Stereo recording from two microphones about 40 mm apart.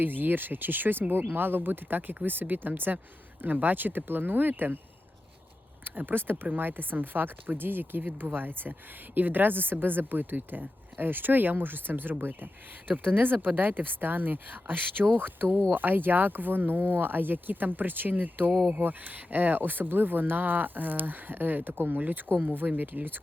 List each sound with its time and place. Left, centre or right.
0.0 s speech: right
5.8 s speech: right